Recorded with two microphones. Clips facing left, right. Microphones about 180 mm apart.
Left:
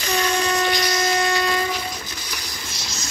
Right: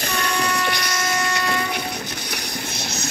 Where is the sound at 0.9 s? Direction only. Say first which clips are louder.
Left 3 dB; 20° left (ahead or behind).